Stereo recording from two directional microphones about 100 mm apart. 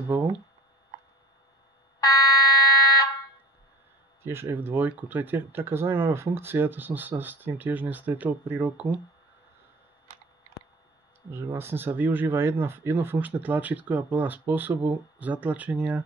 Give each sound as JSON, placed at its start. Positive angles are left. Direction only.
{"t": 2.0, "sound": "fire alarm", "side_deg": 40}
{"t": 4.2, "sound": "speech", "side_deg": -25}
{"t": 11.5, "sound": "speech", "side_deg": -20}